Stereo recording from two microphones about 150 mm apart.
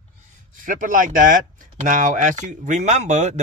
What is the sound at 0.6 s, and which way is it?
Speech, 60° right (ahead or behind).